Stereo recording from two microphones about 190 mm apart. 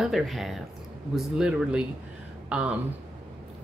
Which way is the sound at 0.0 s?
Centre (ahead or behind).